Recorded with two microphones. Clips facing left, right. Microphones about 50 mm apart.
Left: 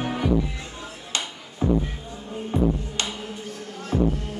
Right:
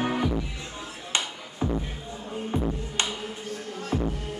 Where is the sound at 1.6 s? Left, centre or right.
Centre.